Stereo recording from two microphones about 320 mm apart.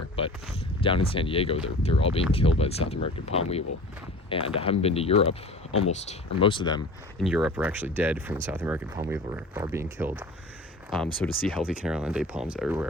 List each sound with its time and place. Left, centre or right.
0.2 s a sound: centre
0.8 s speech: centre
7.2 s speech: centre